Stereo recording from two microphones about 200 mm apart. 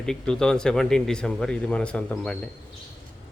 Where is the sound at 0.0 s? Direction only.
5° left (ahead or behind).